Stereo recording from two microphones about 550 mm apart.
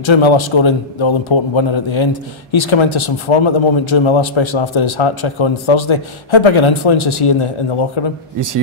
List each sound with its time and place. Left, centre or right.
0.0 s a man's voice: left